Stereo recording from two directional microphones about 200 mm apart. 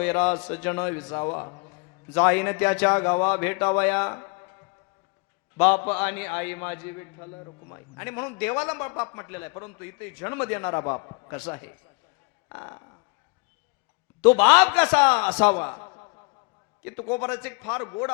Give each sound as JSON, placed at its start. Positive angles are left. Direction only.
{"t": 0.0, "sound": "a man's voice", "side_deg": 10}
{"t": 1.5, "sound": "a sound", "side_deg": 20}
{"t": 2.1, "sound": "a man's voice", "side_deg": 10}
{"t": 5.5, "sound": "a man's voice", "side_deg": 10}
{"t": 11.3, "sound": "a man's voice", "side_deg": 10}
{"t": 14.2, "sound": "a man's voice", "side_deg": 10}